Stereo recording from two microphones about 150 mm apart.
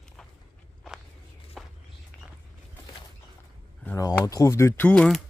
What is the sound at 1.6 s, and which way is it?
Walk, centre (ahead or behind).